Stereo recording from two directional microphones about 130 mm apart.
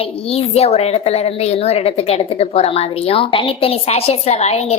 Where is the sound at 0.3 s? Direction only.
50° left (ahead or behind).